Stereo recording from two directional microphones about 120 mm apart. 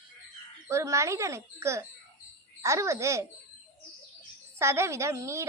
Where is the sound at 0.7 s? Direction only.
25° right (ahead or behind).